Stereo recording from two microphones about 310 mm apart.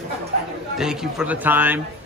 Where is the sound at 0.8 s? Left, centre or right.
Centre.